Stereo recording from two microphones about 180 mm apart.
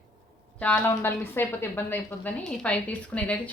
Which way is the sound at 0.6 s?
10° left (ahead or behind).